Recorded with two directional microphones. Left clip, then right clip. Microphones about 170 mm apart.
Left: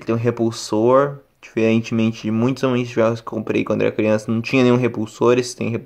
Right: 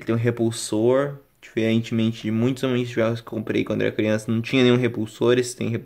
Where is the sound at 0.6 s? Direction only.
Centre (ahead or behind).